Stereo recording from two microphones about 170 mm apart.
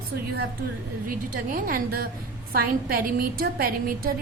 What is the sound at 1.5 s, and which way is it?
A woman's voice, 55° right (ahead or behind).